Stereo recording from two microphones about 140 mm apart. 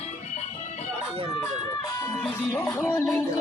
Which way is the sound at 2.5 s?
20° left (ahead or behind).